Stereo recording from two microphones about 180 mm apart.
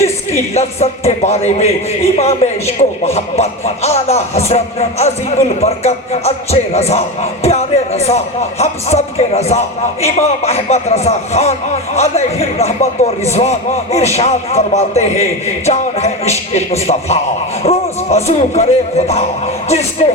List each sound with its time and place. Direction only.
0.5 s speech: 35° left (ahead or behind)